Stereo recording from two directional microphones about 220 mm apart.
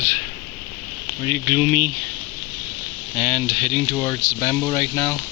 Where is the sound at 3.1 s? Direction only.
20° left (ahead or behind).